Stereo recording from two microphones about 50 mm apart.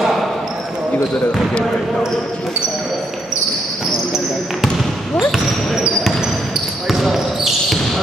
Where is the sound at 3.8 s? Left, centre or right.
Centre.